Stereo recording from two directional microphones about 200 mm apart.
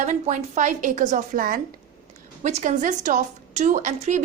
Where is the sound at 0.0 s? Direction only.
35° right (ahead or behind).